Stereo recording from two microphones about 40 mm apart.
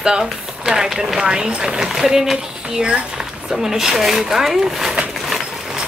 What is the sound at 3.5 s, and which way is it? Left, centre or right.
A woman's voice, centre.